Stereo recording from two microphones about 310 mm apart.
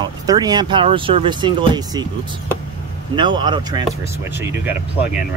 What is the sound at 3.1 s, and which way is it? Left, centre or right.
Speech, centre.